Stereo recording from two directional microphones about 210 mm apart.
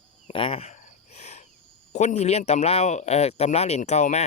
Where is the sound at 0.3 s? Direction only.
25° left (ahead or behind).